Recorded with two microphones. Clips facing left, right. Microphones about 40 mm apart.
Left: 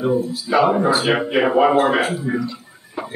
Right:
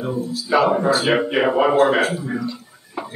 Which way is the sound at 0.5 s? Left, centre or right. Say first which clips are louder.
Left 1 dB; centre.